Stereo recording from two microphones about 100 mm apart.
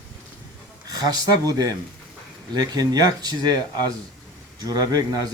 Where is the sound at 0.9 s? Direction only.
40° right (ahead or behind).